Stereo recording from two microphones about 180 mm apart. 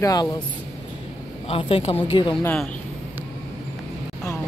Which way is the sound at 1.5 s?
30° left (ahead or behind).